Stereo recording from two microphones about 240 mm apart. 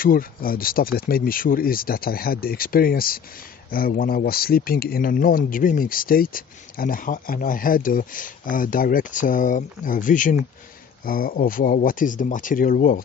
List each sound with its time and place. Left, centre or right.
0.0 s speech: left